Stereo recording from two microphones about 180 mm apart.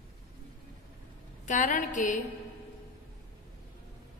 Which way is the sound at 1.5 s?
45° left (ahead or behind).